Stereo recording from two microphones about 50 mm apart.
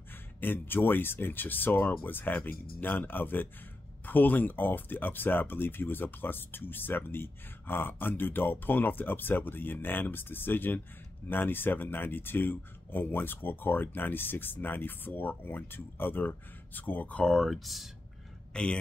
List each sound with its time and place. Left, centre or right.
0.4 s speech: left
17.2 s speech: centre
17.5 s speech: centre
18.5 s a man's voice: centre